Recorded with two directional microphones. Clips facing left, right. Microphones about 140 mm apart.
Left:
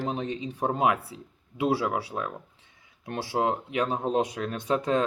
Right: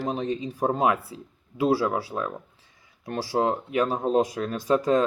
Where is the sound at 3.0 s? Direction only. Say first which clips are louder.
Right 2 dB; 20° left (ahead or behind).